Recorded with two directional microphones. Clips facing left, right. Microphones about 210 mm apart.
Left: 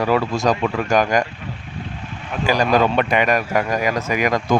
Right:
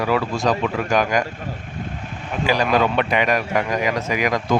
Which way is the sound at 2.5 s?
45° left (ahead or behind).